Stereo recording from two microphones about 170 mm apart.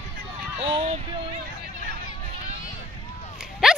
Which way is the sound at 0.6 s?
35° right (ahead or behind).